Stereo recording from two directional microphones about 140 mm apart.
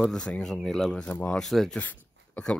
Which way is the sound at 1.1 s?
15° left (ahead or behind).